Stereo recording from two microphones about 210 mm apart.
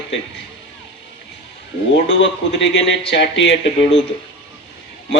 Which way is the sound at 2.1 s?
60° left (ahead or behind).